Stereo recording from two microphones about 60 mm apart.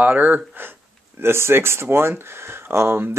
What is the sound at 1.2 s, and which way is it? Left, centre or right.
Speech, right.